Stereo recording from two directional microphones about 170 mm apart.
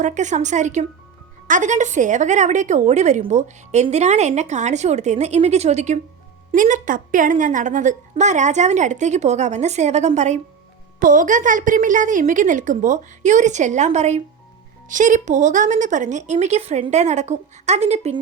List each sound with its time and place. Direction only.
0.0 s a woman's voice: 45° right (ahead or behind)